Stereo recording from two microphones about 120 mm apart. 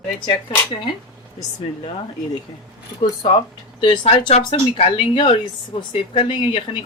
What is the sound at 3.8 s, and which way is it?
Speech, 45° left (ahead or behind).